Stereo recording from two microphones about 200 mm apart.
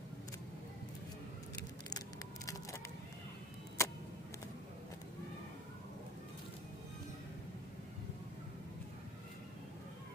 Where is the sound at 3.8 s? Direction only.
15° left (ahead or behind).